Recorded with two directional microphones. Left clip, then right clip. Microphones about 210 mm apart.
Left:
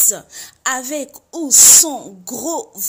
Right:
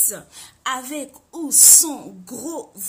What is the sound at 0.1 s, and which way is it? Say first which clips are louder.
A woman's voice: left 9 dB; 30° left (ahead or behind).